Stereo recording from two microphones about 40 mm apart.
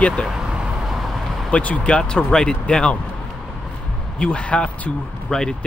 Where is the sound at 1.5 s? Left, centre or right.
Left.